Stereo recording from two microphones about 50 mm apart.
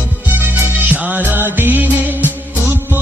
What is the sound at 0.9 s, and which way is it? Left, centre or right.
Music, right.